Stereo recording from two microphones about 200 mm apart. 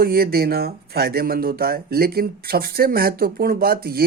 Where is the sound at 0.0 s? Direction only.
50° right (ahead or behind).